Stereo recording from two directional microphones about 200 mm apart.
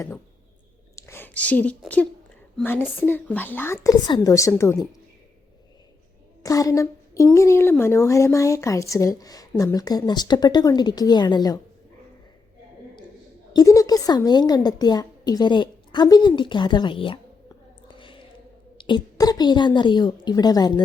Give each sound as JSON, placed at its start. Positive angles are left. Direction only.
{"t": 0.9, "sound": "a woman's voice", "side_deg": 15}
{"t": 6.4, "sound": "a woman's voice", "side_deg": 15}
{"t": 13.5, "sound": "a woman's voice", "side_deg": 20}